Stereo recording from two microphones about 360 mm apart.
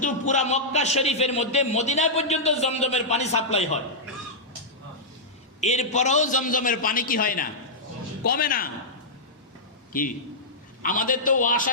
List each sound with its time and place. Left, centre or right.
0.0 s a man's voice: centre
5.5 s a man's voice: centre
9.9 s a man's voice: left